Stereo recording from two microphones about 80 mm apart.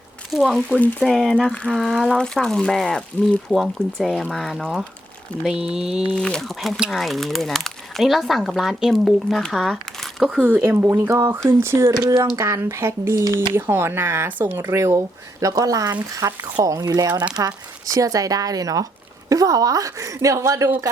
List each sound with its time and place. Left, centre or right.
0.3 s speech: centre
0.8 s speech: centre
1.0 s speech: centre
6.1 s speech: centre
10.4 s speech: right
14.8 s speech: right